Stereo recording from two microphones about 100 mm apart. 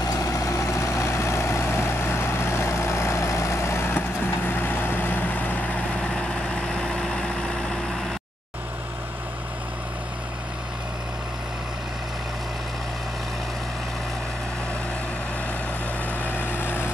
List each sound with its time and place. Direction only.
0.0 s vehicle: 35° left (ahead or behind); by 8.0 s 5° left (ahead or behind)
16.1 s vehicle: 20° left (ahead or behind)